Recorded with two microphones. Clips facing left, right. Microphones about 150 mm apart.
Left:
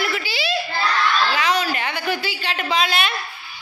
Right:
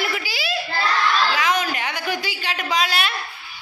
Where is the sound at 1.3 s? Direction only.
10° right (ahead or behind).